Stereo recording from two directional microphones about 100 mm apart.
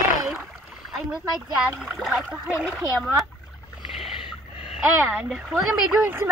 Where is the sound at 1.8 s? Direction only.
Centre (ahead or behind).